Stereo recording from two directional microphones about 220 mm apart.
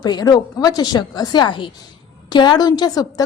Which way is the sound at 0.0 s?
20° left (ahead or behind).